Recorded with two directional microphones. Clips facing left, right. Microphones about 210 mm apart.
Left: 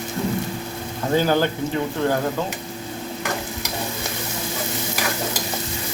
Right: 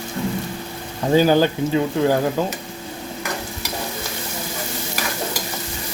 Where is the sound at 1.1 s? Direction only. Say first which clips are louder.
Right 4 dB; 15° right (ahead or behind).